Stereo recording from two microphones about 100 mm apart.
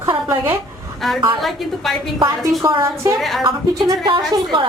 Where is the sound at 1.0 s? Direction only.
Centre (ahead or behind).